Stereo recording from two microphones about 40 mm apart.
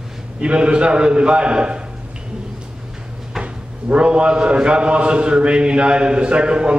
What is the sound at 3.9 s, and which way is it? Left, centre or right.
A man's voice, right.